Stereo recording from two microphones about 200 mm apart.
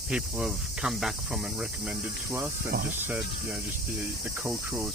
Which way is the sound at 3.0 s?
10° right (ahead or behind).